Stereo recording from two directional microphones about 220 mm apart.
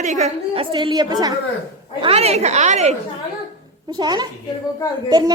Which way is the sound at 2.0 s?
30° right (ahead or behind).